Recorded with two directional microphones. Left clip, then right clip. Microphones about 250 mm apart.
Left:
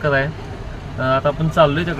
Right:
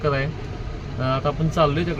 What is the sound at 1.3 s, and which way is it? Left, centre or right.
Speech, centre.